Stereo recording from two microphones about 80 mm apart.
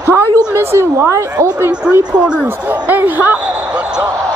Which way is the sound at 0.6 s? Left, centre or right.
Right.